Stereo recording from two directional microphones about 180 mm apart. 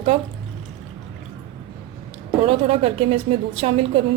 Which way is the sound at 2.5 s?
35° right (ahead or behind).